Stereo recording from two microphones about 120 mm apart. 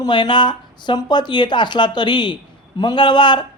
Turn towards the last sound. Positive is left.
turn(degrees=40)  # may be behind; listen again after turning